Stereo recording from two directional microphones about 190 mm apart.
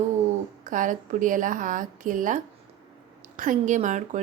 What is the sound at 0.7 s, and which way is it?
A woman's voice, 45° right (ahead or behind).